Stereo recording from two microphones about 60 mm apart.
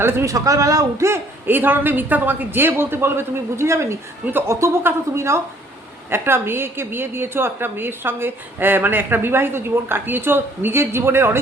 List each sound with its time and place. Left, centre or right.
0.0 s speech: right
0.3 s a man's voice: right
1.5 s a woman's voice: right